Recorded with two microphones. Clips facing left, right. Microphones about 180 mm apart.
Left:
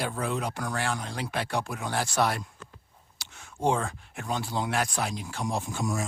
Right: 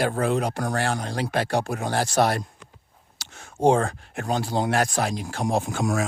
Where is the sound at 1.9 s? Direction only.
40° right (ahead or behind).